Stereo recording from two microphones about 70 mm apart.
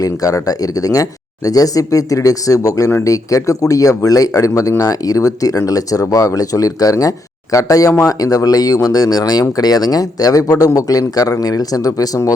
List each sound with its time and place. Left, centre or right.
0.0 s speech: left